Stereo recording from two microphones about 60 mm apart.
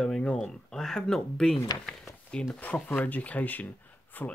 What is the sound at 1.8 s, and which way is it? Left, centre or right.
Speech, centre.